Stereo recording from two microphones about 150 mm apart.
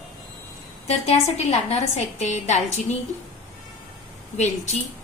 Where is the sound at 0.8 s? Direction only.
50° left (ahead or behind).